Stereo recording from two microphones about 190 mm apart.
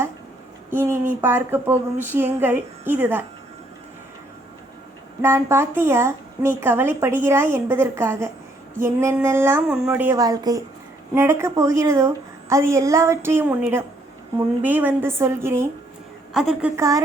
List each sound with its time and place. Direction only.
0.7 s speech: 10° right (ahead or behind)
5.2 s speech: 15° right (ahead or behind)
16.3 s speech: centre (ahead or behind)